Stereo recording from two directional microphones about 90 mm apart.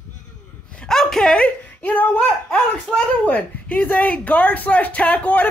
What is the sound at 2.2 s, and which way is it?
Speech, 10° left (ahead or behind).